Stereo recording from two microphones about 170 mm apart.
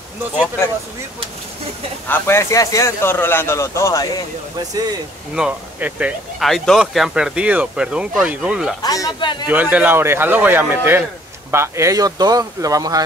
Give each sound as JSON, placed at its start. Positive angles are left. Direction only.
{"t": 2.0, "sound": "speech", "side_deg": 15}
{"t": 5.3, "sound": "speech", "side_deg": -5}
{"t": 8.8, "sound": "speech", "side_deg": 20}
{"t": 9.5, "sound": "speech", "side_deg": -10}